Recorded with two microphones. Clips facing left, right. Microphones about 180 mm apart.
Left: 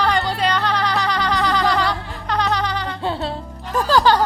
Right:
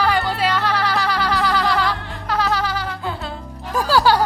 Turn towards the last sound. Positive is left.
turn(degrees=-10)  # may be behind; listen again after turning